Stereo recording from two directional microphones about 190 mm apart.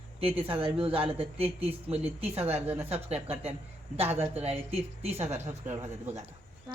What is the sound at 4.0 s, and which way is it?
Speech, 10° right (ahead or behind).